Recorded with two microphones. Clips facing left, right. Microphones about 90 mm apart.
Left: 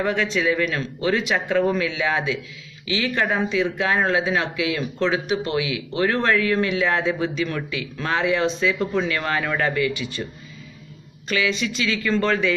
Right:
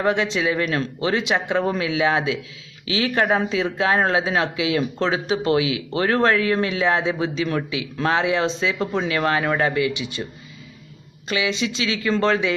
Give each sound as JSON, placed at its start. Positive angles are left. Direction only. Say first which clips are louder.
{"t": 0.0, "sound": "speech", "louder": "right 1 dB", "side_deg": -25}
{"t": 9.9, "sound": "speech", "louder": "even", "side_deg": -20}
{"t": 11.2, "sound": "speech", "louder": "even", "side_deg": -20}